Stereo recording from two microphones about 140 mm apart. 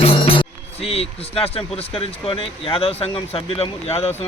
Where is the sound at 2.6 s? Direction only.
40° left (ahead or behind).